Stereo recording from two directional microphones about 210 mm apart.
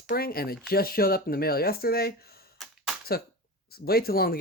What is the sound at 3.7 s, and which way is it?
Speech, 45° left (ahead or behind).